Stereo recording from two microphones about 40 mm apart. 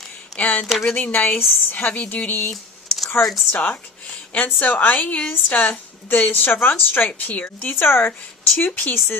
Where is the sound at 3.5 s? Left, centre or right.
Left.